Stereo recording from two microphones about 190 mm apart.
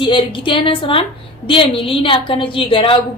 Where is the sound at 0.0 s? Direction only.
25° left (ahead or behind).